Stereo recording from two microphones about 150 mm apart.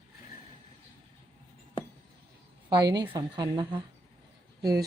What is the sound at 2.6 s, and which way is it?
A woman's voice, 30° right (ahead or behind).